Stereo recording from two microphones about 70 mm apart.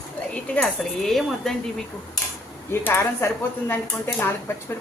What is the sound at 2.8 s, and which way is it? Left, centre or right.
Speech, left.